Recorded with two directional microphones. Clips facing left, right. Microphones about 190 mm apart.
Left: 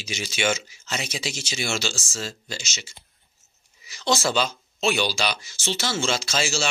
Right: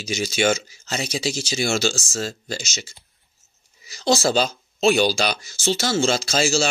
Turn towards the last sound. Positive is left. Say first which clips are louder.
# right 6 dB
turn(degrees=-40)  # may be behind; listen again after turning